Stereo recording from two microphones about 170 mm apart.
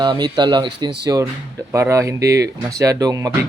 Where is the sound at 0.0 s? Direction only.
25° right (ahead or behind).